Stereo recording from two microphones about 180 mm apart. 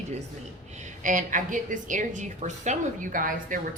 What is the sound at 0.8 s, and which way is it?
A woman's voice, 45° right (ahead or behind).